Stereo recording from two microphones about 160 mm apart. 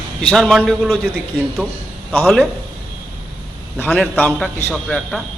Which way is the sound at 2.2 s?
5° left (ahead or behind).